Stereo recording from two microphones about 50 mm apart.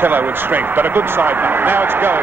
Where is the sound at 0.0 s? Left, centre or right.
Right.